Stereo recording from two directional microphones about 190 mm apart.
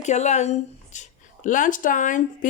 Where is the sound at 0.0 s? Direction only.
35° left (ahead or behind).